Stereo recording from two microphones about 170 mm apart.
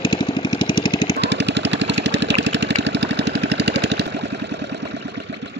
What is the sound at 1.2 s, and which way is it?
Engine, 90° right.